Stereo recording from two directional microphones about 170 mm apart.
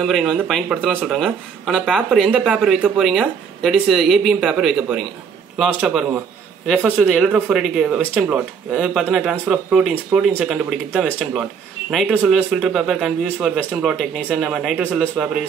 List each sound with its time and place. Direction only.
0.0 s a man's voice: centre (ahead or behind)
12.1 s a man's voice: 10° right (ahead or behind)